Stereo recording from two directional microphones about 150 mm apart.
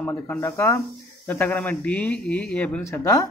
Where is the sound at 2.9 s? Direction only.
20° left (ahead or behind).